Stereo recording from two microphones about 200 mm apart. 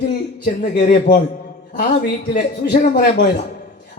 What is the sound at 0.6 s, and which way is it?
Speech, 40° left (ahead or behind).